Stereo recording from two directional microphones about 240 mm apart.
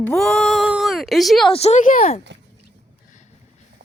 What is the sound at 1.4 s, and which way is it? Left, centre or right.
Speech, left.